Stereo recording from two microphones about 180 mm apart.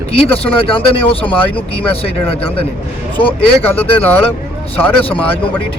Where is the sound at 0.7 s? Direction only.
30° left (ahead or behind).